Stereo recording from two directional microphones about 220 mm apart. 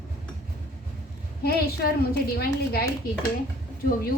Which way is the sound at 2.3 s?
45° left (ahead or behind).